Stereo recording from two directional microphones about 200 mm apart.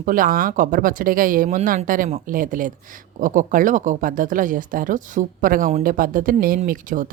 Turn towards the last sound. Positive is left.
turn(degrees=-40)  # may be behind; listen again after turning